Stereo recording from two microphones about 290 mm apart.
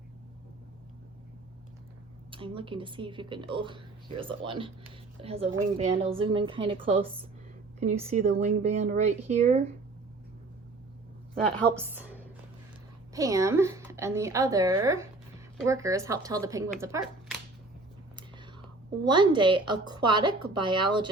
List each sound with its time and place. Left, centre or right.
2.3 s a woman's voice: centre
11.7 s a woman's voice: centre
19.0 s a woman's voice: centre